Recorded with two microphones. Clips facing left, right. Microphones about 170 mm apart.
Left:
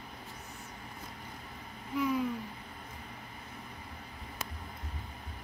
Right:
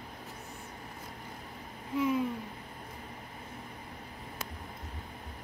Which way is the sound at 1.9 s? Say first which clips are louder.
Right 2 dB; 25° right (ahead or behind).